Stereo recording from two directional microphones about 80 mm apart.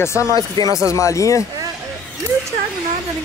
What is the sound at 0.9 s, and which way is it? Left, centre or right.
Speech, left.